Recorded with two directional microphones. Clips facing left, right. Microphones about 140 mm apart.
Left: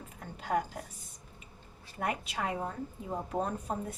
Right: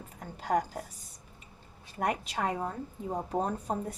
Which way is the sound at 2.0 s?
40° right (ahead or behind).